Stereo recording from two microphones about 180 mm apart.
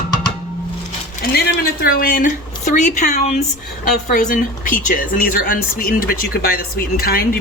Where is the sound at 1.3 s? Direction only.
55° left (ahead or behind).